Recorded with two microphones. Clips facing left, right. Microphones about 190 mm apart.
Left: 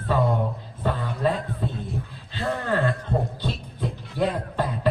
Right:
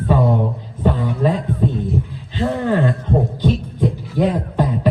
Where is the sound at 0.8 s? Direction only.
15° right (ahead or behind).